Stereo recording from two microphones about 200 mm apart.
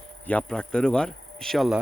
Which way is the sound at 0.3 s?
5° left (ahead or behind).